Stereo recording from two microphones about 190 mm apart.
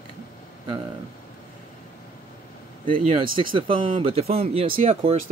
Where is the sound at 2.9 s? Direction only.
30° right (ahead or behind).